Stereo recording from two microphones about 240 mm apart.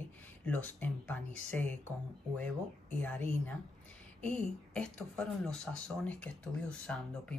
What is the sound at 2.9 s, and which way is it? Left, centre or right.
Speech, centre.